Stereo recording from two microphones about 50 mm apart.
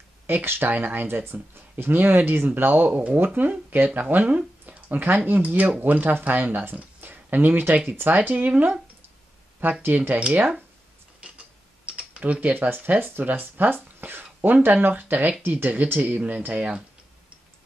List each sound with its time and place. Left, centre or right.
0.3 s speech: right
10.1 s speech: right
11.1 s a sound: right
11.9 s speech: right